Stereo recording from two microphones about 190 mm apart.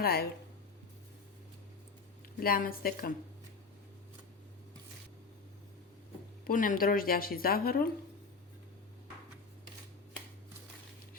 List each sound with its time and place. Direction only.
0.0 s speech: 55° left (ahead or behind)
2.4 s speech: 50° left (ahead or behind)
6.5 s speech: 45° left (ahead or behind)